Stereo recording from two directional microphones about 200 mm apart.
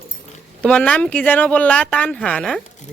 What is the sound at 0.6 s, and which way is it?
Speech, 5° left (ahead or behind).